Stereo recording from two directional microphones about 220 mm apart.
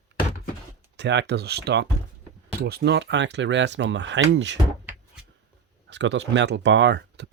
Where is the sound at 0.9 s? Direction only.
50° right (ahead or behind).